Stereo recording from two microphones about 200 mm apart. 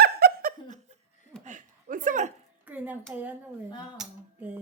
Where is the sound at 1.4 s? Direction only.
40° right (ahead or behind).